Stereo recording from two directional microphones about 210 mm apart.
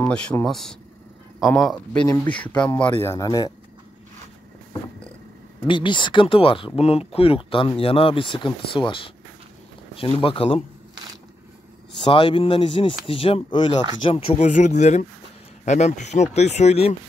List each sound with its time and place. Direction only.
0.0 s speech: 5° left (ahead or behind)
5.7 s speech: 20° left (ahead or behind)
12.0 s speech: 25° left (ahead or behind)